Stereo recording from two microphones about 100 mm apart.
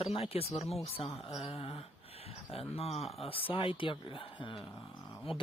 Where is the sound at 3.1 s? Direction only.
70° left (ahead or behind).